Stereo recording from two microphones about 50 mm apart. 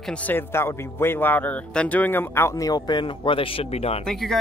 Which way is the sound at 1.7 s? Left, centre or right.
Left.